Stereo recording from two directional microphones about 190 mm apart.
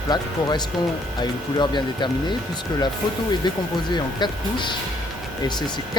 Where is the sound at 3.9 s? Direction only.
25° left (ahead or behind).